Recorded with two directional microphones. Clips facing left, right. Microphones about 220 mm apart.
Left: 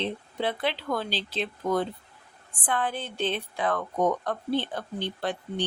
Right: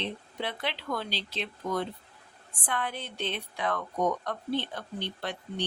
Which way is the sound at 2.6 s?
30° left (ahead or behind).